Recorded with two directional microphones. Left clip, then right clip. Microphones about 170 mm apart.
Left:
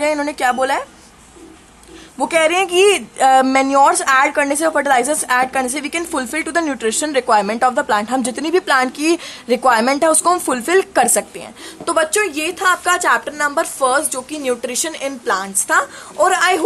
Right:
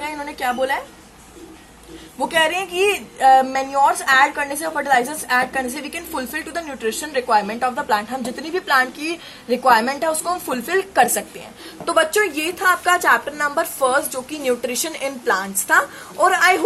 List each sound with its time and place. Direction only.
0.0 s a woman's voice: 45° left (ahead or behind)
2.1 s speech: 35° left (ahead or behind)
11.9 s a woman's voice: 15° left (ahead or behind)